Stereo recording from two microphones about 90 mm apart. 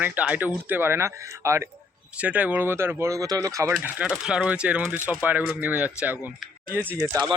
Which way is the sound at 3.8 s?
20° right (ahead or behind).